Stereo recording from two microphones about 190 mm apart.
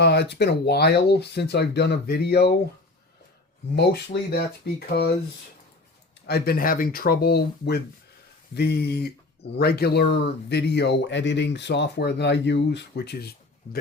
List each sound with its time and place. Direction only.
0.0 s speech: 60° left (ahead or behind)
3.8 s speech: 60° left (ahead or behind)
6.2 s speech: 55° left (ahead or behind)